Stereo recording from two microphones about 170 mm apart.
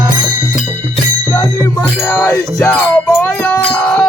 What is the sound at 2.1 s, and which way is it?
Music, 15° left (ahead or behind).